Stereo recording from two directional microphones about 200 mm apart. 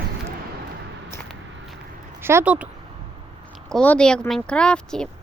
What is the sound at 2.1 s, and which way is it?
Speech, 10° right (ahead or behind).